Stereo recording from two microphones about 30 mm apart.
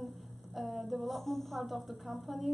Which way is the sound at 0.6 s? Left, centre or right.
Centre.